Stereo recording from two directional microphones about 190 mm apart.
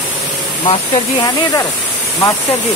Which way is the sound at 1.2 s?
20° left (ahead or behind).